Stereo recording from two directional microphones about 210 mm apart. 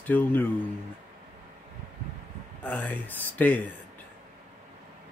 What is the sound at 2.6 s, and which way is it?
Speech, 5° left (ahead or behind).